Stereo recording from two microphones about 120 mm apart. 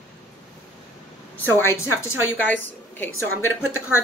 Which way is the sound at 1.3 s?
20° left (ahead or behind).